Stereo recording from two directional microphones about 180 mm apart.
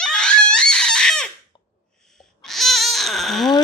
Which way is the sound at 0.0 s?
5° left (ahead or behind).